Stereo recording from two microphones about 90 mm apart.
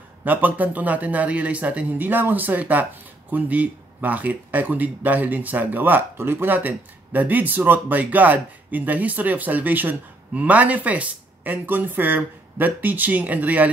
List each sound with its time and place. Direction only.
0.2 s speech: 20° right (ahead or behind)